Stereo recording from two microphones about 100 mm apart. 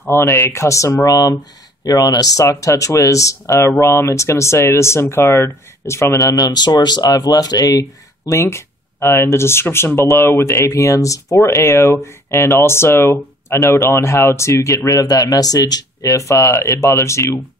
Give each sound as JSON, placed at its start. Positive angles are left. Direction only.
{"t": 0.1, "sound": "speech", "side_deg": 25}
{"t": 8.3, "sound": "speech", "side_deg": 25}